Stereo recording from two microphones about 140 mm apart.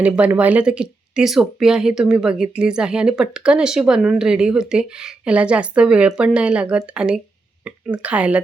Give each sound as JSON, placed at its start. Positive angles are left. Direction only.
{"t": 0.0, "sound": "a woman's voice", "side_deg": -10}